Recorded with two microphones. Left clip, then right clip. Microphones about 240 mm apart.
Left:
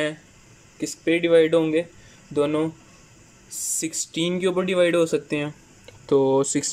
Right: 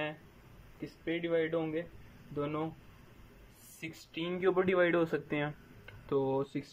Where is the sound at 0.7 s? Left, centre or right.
Left.